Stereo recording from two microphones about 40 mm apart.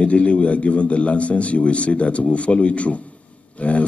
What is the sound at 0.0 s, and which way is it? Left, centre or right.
A man's voice, left.